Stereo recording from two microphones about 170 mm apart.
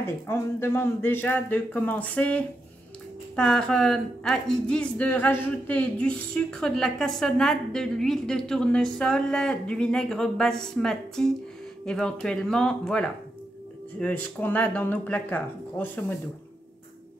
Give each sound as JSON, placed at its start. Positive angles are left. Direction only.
{"t": 0.0, "sound": "a woman's voice", "side_deg": 15}